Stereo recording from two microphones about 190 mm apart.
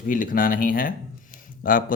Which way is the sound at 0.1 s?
45° left (ahead or behind).